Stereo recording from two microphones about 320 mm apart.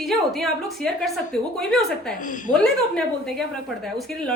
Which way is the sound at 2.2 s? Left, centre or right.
Left.